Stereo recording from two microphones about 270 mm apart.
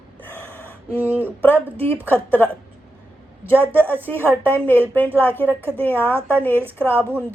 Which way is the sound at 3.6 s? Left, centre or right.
Centre.